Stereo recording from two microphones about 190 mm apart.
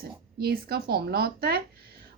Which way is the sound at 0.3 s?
55° right (ahead or behind).